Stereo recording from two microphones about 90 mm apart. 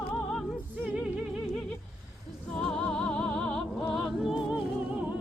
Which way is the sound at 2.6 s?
5° left (ahead or behind).